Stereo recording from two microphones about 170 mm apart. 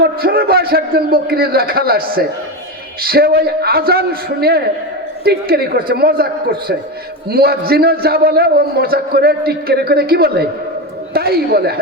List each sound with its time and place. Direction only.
0.2 s a man's voice: 65° right (ahead or behind)